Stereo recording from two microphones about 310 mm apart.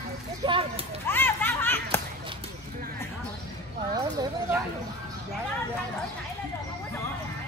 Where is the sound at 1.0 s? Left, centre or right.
Centre.